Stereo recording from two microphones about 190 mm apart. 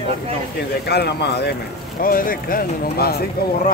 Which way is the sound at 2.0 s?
50° left (ahead or behind).